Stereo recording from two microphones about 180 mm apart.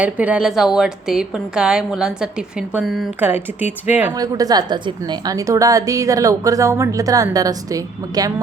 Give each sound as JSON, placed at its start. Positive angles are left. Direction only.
{"t": 0.0, "sound": "a woman's voice", "side_deg": -10}
{"t": 4.1, "sound": "a woman's voice", "side_deg": -20}